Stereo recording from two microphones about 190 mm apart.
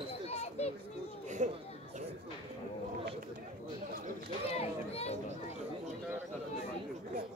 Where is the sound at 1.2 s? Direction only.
40° right (ahead or behind).